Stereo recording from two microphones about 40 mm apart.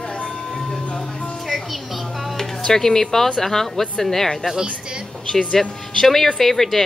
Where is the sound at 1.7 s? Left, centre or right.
Centre.